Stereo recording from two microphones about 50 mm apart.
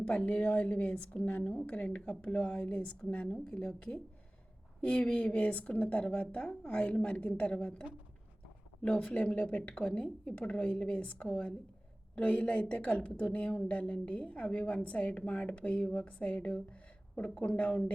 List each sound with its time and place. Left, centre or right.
0.0 s a woman's voice: centre
9.2 s a woman's voice: left